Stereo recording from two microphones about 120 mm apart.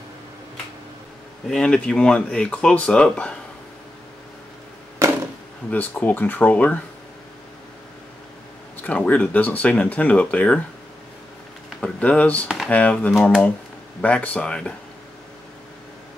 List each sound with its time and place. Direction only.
1.5 s speech: 5° left (ahead or behind)
5.0 s chop: 25° right (ahead or behind)
5.7 s speech: 15° left (ahead or behind)
8.8 s speech: 10° left (ahead or behind)
11.8 s speech: 10° left (ahead or behind)